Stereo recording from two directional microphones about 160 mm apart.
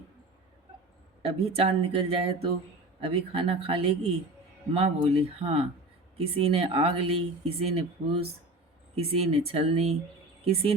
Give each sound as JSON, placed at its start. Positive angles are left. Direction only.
{"t": 1.2, "sound": "speech", "side_deg": -40}